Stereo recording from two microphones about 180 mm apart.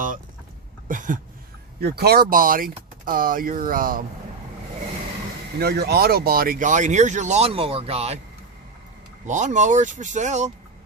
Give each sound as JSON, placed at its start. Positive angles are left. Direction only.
{"t": 0.9, "sound": "a sound", "side_deg": -45}
{"t": 1.8, "sound": "speech", "side_deg": -60}
{"t": 5.5, "sound": "speech", "side_deg": -60}
{"t": 9.2, "sound": "speech", "side_deg": -45}